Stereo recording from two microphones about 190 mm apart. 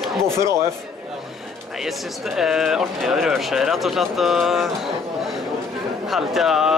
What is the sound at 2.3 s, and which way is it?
Speech, centre (ahead or behind).